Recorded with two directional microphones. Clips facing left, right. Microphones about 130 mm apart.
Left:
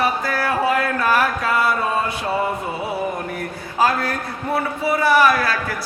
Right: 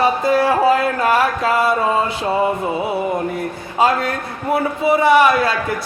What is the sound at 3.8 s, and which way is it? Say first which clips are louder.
Speech: right 3 dB; 25° right (ahead or behind).